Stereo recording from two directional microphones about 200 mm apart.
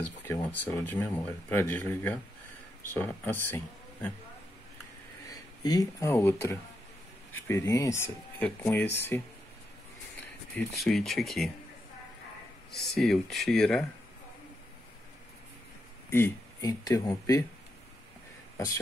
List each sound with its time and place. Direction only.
0.2 s speech: 10° left (ahead or behind)
5.3 s speech: 20° left (ahead or behind)
10.5 s speech: centre (ahead or behind)
12.9 s speech: centre (ahead or behind)
16.1 s speech: 15° left (ahead or behind)